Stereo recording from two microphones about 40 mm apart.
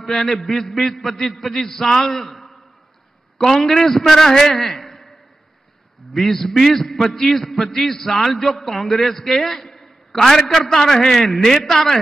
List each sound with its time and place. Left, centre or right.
0.0 s a man's voice: centre
6.1 s a man's voice: centre
9.7 s a sound: centre
10.2 s a man's voice: centre